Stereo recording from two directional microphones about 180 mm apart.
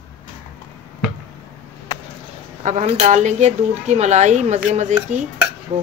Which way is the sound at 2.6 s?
40° right (ahead or behind).